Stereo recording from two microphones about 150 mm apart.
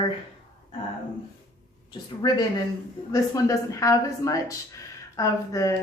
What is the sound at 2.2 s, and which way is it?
A woman's voice, 30° left (ahead or behind).